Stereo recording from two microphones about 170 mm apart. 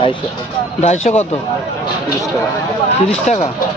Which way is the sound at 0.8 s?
40° left (ahead or behind).